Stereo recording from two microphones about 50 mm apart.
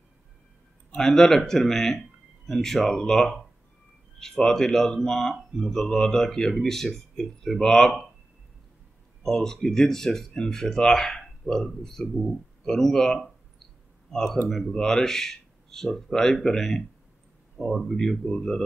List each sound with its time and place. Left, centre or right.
0.9 s speech: centre
9.2 s speech: centre